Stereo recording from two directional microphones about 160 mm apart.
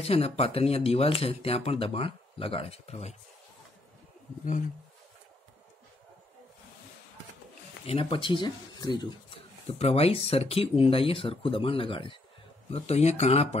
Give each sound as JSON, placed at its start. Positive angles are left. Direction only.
{"t": 0.0, "sound": "speech", "side_deg": 40}
{"t": 7.8, "sound": "speech", "side_deg": 35}